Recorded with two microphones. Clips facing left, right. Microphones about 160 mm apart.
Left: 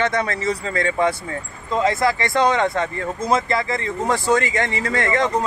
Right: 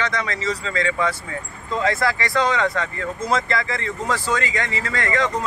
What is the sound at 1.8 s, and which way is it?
Speech, 20° left (ahead or behind).